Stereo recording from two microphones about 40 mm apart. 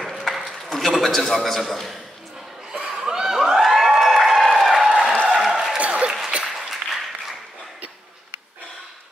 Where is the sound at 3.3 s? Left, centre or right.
Centre.